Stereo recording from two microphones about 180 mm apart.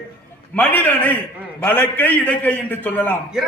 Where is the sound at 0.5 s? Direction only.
10° left (ahead or behind).